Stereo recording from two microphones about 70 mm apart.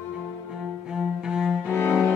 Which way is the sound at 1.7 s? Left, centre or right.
Left.